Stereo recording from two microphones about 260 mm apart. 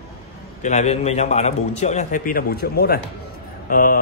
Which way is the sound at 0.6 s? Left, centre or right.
Left.